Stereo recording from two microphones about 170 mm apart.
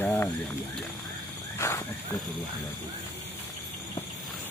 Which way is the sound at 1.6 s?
15° left (ahead or behind).